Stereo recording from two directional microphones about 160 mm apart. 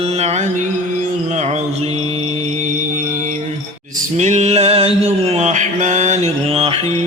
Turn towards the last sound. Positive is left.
turn(degrees=-35)  # may be behind; listen again after turning